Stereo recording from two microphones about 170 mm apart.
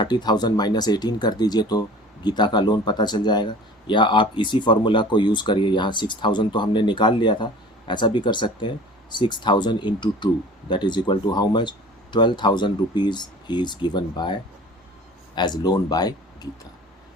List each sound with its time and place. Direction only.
0.0 s speech: 25° left (ahead or behind)
15.4 s speech: 25° left (ahead or behind)